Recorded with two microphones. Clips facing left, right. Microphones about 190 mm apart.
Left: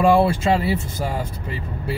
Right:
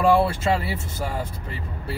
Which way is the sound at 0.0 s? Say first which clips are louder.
Left 3 dB; 15° left (ahead or behind).